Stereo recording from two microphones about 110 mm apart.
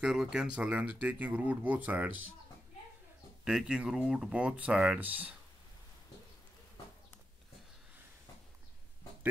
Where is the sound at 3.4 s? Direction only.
5° right (ahead or behind).